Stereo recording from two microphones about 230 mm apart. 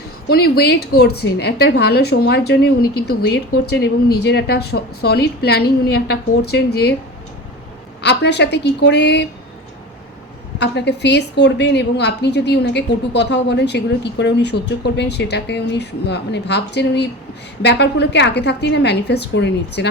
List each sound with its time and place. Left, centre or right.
0.3 s a woman's voice: left
8.0 s a woman's voice: left
10.6 s a woman's voice: left